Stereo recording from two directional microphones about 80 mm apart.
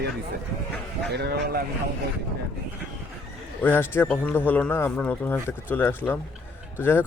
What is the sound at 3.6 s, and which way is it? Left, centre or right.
Speech, left.